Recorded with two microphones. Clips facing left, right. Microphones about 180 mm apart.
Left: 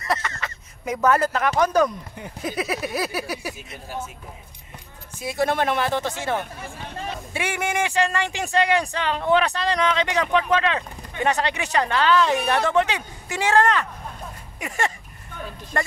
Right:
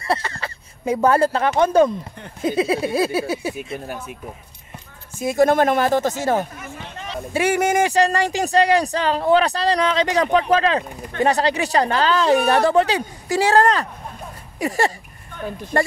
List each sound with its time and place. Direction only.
0.0 s speech: 30° right (ahead or behind)
1.6 s a sound: 25° right (ahead or behind)
3.8 s speech: 60° right (ahead or behind)
5.1 s speech: 45° right (ahead or behind)
14.6 s a sound: 35° right (ahead or behind)
15.7 s speech: 35° right (ahead or behind)